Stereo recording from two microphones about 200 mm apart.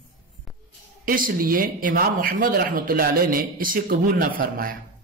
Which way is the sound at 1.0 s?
45° right (ahead or behind).